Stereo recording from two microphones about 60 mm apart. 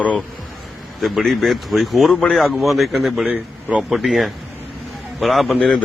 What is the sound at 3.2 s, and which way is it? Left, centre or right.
Speech, centre.